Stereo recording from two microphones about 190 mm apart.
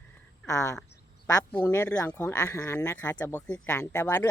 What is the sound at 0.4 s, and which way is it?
Speech, 15° left (ahead or behind).